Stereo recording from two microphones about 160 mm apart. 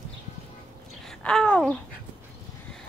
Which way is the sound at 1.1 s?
5° left (ahead or behind).